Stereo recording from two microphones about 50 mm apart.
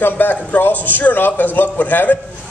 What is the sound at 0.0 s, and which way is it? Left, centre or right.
A man's voice, left.